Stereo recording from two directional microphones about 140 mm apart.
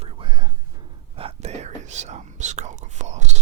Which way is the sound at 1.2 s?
50° right (ahead or behind).